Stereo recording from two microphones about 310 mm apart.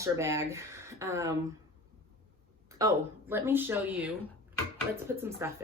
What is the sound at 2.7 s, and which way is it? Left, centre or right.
Speech, centre.